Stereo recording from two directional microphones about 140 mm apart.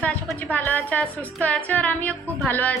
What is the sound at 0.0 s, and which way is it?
A woman's voice, 10° left (ahead or behind).